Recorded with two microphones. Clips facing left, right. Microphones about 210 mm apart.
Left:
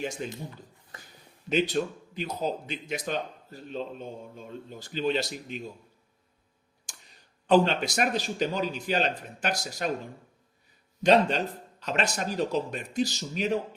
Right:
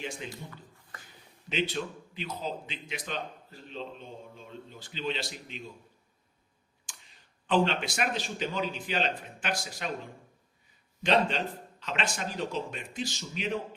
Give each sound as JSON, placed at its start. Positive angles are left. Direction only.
{"t": 0.0, "sound": "speech", "side_deg": 45}
{"t": 1.5, "sound": "speech", "side_deg": 40}
{"t": 6.8, "sound": "speech", "side_deg": 40}
{"t": 11.0, "sound": "a man's voice", "side_deg": 40}